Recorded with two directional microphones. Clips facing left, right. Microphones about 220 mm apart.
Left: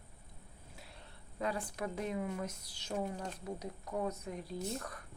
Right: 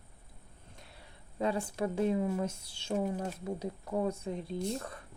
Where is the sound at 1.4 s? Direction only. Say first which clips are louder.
Right 6 dB; 25° right (ahead or behind).